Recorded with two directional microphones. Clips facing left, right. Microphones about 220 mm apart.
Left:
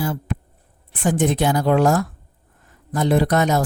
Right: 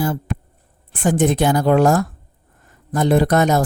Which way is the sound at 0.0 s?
45° right (ahead or behind).